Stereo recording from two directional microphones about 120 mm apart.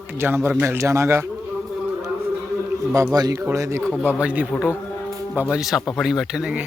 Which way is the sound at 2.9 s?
30° right (ahead or behind).